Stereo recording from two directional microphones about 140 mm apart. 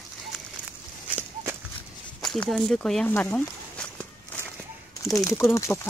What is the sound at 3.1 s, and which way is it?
Walk, 15° left (ahead or behind).